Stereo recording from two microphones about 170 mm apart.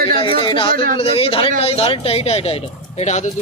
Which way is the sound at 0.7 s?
60° right (ahead or behind).